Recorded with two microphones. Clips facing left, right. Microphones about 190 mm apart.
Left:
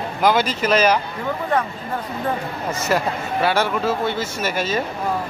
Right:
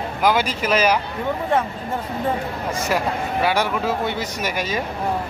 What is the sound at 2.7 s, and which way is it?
Speech, 10° right (ahead or behind).